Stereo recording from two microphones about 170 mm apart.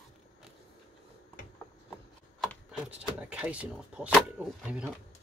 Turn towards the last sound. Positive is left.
turn(degrees=-5)  # may be behind; listen again after turning